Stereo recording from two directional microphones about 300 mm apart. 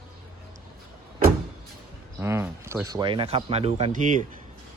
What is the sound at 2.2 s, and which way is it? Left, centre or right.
Speech, centre.